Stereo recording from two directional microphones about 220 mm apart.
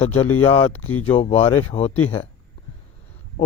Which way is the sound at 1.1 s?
25° left (ahead or behind).